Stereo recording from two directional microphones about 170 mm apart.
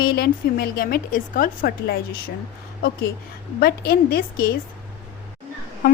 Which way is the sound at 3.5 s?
65° left (ahead or behind).